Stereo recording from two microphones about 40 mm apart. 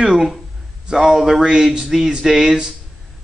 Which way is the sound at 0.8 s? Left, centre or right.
Centre.